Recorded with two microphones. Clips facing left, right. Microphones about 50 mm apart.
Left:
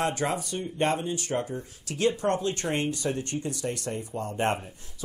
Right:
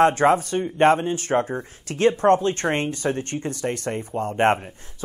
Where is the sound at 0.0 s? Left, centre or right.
Right.